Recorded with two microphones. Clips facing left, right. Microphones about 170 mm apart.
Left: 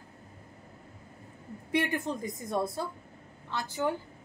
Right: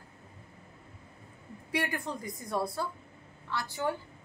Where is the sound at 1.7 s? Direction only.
20° left (ahead or behind).